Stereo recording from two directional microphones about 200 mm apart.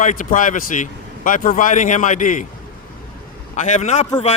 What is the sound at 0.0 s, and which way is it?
A man's voice, 40° left (ahead or behind).